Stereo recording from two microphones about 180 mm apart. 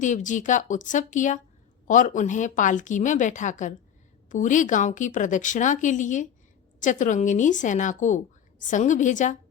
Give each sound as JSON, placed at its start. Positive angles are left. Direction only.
{"t": 0.0, "sound": "a woman's voice", "side_deg": 45}